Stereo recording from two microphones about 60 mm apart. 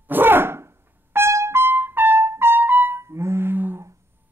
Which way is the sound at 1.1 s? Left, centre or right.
Right.